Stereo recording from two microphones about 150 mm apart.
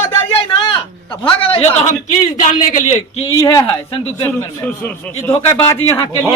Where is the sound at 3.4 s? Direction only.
25° left (ahead or behind).